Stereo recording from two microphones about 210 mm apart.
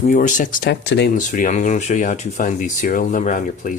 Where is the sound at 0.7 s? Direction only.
55° left (ahead or behind).